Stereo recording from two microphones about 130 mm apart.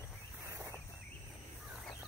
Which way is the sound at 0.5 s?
15° right (ahead or behind).